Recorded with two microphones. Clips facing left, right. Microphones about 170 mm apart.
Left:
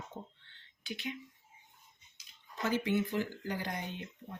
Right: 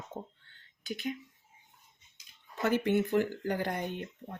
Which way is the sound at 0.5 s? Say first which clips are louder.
Right 4 dB; 45° right (ahead or behind).